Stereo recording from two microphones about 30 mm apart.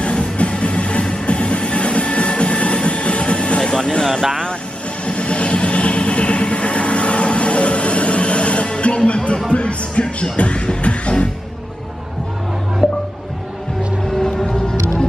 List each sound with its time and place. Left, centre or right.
0.0 s music: left
4.0 s speech: centre
5.0 s music: left
14.1 s music: centre
14.5 s music: left